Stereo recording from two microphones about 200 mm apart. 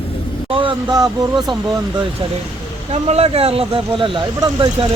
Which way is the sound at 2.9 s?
30° right (ahead or behind).